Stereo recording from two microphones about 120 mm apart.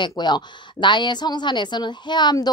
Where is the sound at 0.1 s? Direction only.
40° left (ahead or behind).